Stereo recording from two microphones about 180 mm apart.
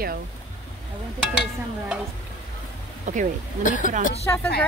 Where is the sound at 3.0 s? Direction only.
45° right (ahead or behind).